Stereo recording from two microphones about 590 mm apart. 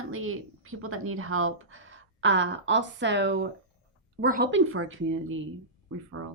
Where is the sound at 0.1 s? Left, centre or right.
Right.